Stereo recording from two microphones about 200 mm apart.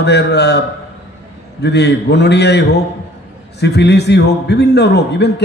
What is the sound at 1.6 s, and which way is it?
A man's voice, 55° left (ahead or behind).